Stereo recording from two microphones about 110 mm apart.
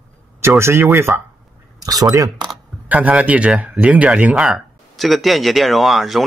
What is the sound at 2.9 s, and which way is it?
Speech, 10° right (ahead or behind).